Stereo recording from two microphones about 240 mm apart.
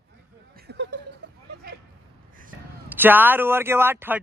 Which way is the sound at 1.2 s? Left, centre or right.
Right.